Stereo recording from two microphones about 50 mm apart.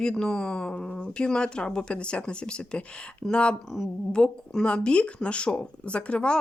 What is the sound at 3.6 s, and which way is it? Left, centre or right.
Speech, centre.